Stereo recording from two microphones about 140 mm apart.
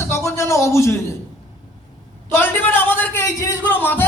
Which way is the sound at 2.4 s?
15° left (ahead or behind).